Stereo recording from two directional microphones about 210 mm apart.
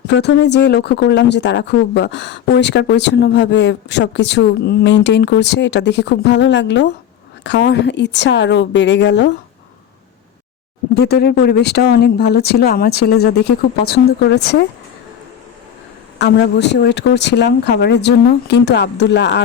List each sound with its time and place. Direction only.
0.1 s speech: 55° left (ahead or behind)
10.9 s speech: 50° left (ahead or behind)
16.1 s speech: 55° left (ahead or behind)